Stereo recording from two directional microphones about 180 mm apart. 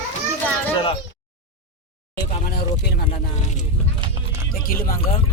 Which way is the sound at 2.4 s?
60° left (ahead or behind).